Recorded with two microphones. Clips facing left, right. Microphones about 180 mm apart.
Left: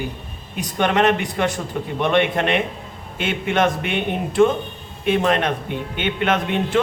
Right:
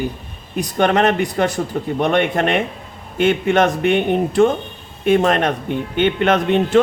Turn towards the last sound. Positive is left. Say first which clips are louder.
# right 5 dB
turn(degrees=-45)  # may be behind; listen again after turning